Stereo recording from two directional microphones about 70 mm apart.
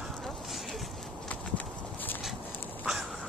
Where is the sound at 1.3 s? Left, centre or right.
Left.